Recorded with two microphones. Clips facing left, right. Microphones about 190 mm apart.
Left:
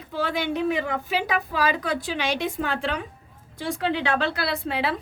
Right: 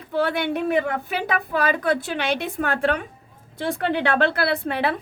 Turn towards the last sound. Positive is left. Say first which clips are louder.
# right 3 dB
turn(degrees=-55)  # may be behind; listen again after turning